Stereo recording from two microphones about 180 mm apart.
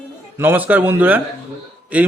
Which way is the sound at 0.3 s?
10° right (ahead or behind).